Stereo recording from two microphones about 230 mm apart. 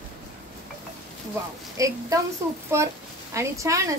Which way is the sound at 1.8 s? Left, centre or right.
Centre.